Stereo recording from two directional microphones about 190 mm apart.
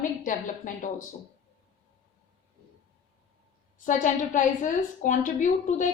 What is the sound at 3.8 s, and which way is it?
A woman's voice, 40° left (ahead or behind).